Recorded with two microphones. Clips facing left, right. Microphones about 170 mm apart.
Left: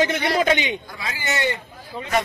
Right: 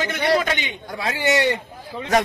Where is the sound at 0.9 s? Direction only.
65° right (ahead or behind).